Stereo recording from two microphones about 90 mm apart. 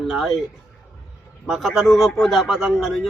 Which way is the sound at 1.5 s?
Centre (ahead or behind).